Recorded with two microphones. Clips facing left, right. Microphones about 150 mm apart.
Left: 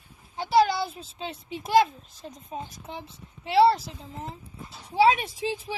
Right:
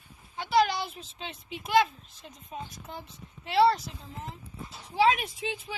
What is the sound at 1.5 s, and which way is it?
Speech, 35° left (ahead or behind).